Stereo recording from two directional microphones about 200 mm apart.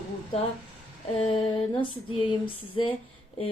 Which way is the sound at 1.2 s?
25° left (ahead or behind).